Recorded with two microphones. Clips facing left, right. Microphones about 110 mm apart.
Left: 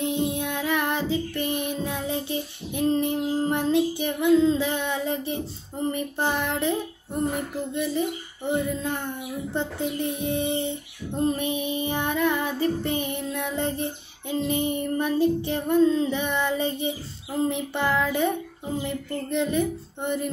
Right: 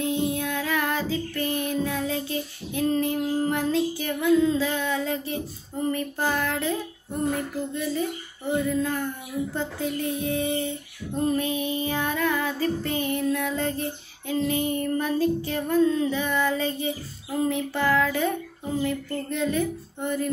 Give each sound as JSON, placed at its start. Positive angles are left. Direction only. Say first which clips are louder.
{"t": 0.0, "sound": "child singing", "louder": "even", "side_deg": 25}
{"t": 7.9, "sound": "child singing", "louder": "left 1 dB", "side_deg": 20}